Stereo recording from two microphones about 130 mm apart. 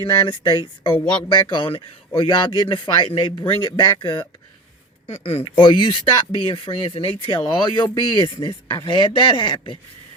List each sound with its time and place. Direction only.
0.0 s speech: 35° left (ahead or behind)
5.0 s speech: 50° left (ahead or behind)